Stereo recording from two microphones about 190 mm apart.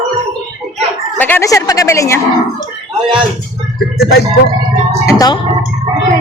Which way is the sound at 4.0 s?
60° left (ahead or behind).